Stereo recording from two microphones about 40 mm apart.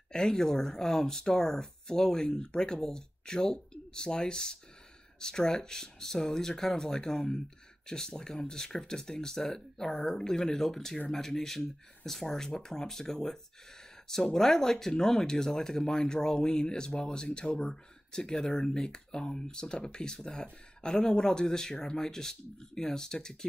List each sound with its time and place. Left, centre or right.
0.1 s speech: centre